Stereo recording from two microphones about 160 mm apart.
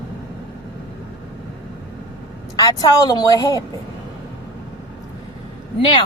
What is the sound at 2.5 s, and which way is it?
Speech, 25° left (ahead or behind).